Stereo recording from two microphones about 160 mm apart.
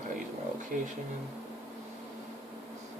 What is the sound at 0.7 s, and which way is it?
Speech, 55° right (ahead or behind).